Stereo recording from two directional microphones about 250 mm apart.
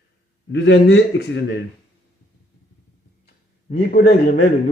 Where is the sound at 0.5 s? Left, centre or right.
Left.